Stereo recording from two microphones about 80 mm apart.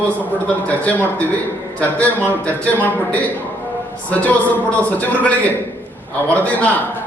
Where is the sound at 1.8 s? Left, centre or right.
Centre.